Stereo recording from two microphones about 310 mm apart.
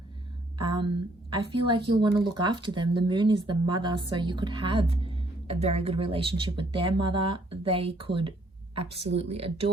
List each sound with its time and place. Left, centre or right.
1.3 s speech: centre